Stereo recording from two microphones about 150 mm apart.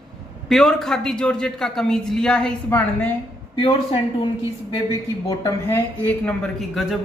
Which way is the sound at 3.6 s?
35° left (ahead or behind).